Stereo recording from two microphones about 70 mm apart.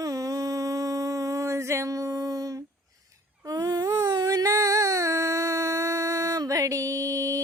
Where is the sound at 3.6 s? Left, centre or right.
Right.